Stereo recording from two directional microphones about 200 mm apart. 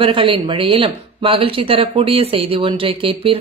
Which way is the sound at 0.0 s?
25° right (ahead or behind).